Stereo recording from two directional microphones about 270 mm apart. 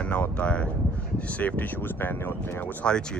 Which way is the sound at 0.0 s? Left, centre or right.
Centre.